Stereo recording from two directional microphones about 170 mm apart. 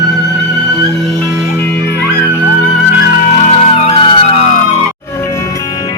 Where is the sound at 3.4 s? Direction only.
35° left (ahead or behind).